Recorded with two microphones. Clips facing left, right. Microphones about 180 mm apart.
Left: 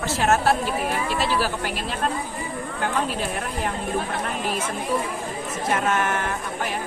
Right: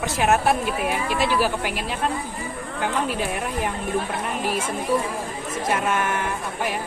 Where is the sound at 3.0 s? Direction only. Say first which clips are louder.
Right 2 dB; 10° right (ahead or behind).